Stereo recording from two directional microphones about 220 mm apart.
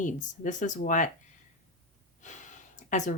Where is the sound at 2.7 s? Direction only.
35° left (ahead or behind).